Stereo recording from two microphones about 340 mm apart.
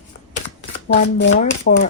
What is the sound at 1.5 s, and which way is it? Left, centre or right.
Speech, left.